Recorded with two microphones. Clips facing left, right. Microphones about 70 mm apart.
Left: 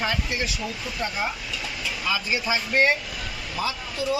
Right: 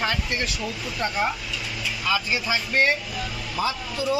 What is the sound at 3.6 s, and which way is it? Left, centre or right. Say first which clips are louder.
Speech: right 2 dB; centre.